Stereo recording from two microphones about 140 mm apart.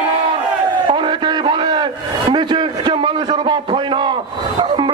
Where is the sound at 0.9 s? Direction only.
35° right (ahead or behind).